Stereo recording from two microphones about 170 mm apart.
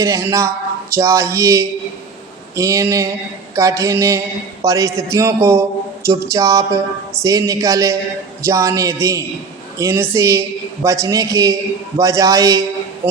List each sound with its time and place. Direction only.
0.0 s speech: 20° right (ahead or behind)